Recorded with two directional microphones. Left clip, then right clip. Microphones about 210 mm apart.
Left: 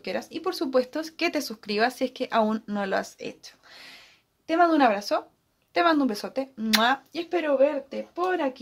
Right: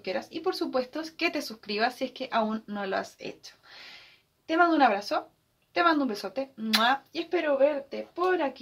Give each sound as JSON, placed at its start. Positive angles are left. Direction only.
{"t": 0.0, "sound": "speech", "side_deg": 50}